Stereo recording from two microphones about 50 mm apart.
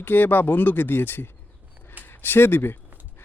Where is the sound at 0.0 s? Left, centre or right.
Left.